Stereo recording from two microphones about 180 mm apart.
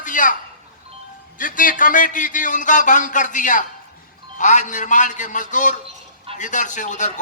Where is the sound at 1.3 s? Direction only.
50° left (ahead or behind).